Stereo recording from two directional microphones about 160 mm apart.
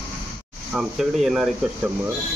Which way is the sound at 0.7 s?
Centre (ahead or behind).